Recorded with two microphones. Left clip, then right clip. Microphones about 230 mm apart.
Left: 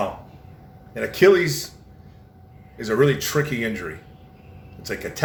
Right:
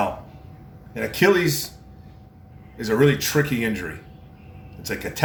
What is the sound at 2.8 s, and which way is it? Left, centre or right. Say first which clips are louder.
Speech: even; centre.